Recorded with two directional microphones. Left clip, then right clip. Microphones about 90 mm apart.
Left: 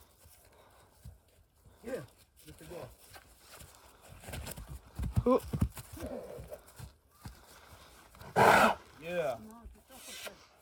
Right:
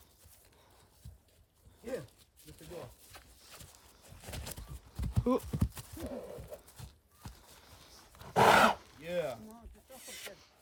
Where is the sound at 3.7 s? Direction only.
20° right (ahead or behind).